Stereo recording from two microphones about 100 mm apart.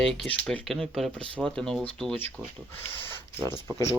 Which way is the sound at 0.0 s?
Centre (ahead or behind).